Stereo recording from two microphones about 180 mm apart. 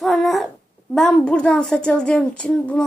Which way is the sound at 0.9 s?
5° left (ahead or behind).